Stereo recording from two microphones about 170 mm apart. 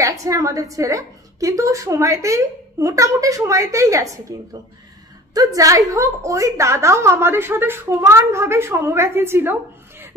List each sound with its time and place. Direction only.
0.0 s a woman's voice: 20° right (ahead or behind)